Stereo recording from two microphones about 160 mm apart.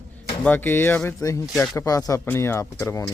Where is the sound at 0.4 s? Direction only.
10° left (ahead or behind).